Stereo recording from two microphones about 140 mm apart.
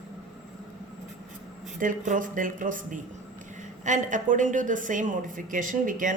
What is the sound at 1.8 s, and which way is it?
A woman's voice, 70° right (ahead or behind).